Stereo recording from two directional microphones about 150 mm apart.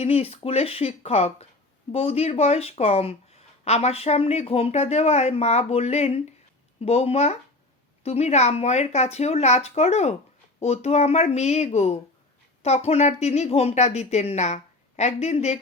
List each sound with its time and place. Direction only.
0.0 s speech: 45° left (ahead or behind)